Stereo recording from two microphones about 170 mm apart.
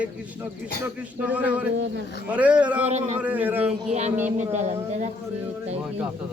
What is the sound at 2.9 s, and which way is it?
Speech, 40° right (ahead or behind).